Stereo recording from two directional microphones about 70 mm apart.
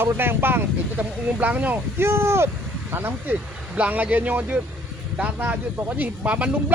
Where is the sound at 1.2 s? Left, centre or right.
Right.